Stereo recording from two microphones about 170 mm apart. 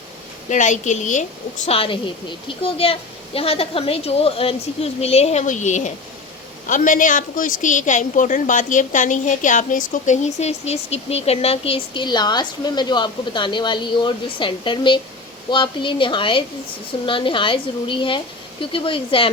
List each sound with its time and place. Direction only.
0.5 s a woman's voice: 45° left (ahead or behind)
1.6 s a woman's voice: 35° left (ahead or behind)